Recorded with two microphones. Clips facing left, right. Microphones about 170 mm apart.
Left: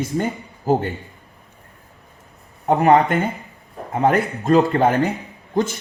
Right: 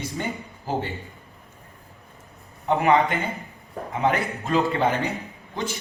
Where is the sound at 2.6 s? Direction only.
40° left (ahead or behind).